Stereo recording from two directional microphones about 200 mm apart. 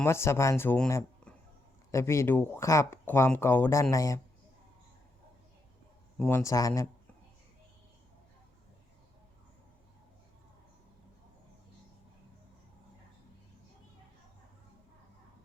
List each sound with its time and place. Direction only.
0.0 s speech: 15° left (ahead or behind)
6.1 s speech: 10° left (ahead or behind)